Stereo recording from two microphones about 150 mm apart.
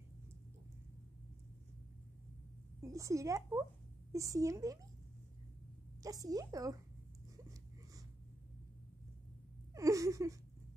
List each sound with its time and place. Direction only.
2.8 s speech: 20° right (ahead or behind)
6.0 s speech: 25° right (ahead or behind)
9.8 s speech: 20° right (ahead or behind)